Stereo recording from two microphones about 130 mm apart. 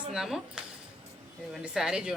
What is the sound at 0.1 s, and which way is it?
Speech, 5° right (ahead or behind).